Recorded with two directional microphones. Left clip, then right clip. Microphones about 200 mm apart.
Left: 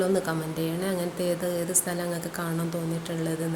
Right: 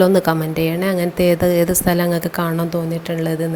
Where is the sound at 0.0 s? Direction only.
40° right (ahead or behind).